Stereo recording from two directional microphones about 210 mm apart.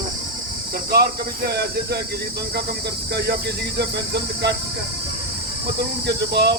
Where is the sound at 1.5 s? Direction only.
50° right (ahead or behind).